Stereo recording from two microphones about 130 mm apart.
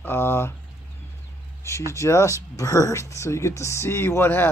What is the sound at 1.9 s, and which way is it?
Speech, 20° left (ahead or behind).